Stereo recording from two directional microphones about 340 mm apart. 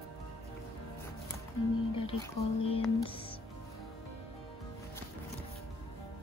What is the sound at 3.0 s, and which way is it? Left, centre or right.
Music, centre.